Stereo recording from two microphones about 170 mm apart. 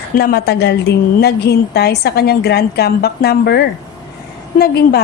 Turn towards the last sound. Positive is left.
turn(degrees=65)  # may be behind; listen again after turning